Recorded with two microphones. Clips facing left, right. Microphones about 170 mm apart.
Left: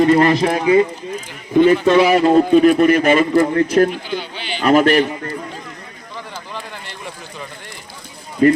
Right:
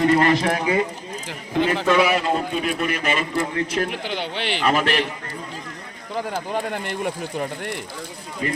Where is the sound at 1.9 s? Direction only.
30° left (ahead or behind).